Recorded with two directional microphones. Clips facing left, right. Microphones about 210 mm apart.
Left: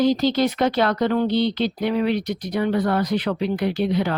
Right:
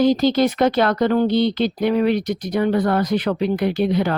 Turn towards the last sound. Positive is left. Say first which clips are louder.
# right 3 dB
turn(degrees=-50)  # may be behind; listen again after turning